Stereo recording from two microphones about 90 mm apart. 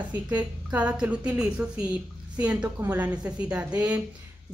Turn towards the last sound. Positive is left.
turn(degrees=-15)  # may be behind; listen again after turning